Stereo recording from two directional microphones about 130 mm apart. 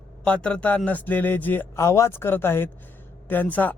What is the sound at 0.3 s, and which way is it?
A man's voice, 10° left (ahead or behind).